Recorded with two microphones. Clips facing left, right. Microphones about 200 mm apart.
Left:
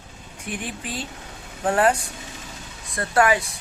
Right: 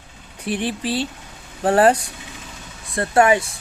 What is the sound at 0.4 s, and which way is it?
Speech, 30° right (ahead or behind).